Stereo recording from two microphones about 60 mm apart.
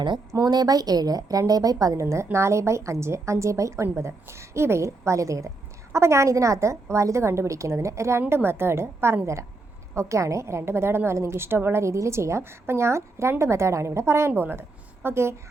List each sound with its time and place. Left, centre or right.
0.3 s a woman's voice: right
8.3 s a woman's voice: right